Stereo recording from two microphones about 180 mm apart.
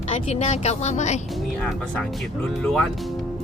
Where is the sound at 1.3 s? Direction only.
Centre (ahead or behind).